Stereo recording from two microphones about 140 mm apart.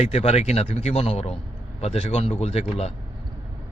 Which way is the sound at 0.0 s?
50° left (ahead or behind).